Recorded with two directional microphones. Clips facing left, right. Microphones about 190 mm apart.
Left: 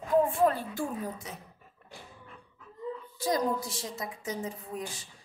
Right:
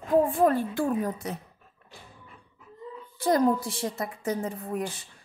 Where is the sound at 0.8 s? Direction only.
70° right (ahead or behind).